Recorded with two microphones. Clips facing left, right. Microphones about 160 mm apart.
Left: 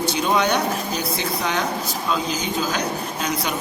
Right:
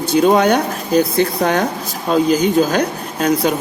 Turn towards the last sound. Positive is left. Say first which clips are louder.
# right 9 dB
turn(degrees=-50)  # may be behind; listen again after turning